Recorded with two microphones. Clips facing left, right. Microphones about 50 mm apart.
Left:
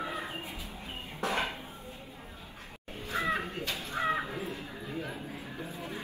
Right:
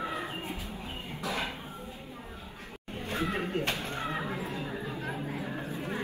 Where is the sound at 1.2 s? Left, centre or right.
Left.